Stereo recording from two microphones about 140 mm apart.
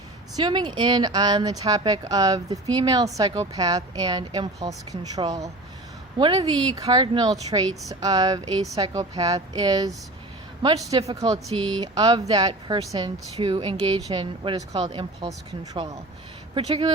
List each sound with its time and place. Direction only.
0.3 s speech: 30° right (ahead or behind)
11.1 s speech: 30° right (ahead or behind)
16.6 s speech: 45° right (ahead or behind)